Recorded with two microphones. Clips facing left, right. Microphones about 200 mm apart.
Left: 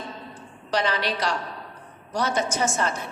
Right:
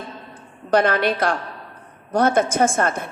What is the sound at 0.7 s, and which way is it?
A woman's voice, 55° right (ahead or behind).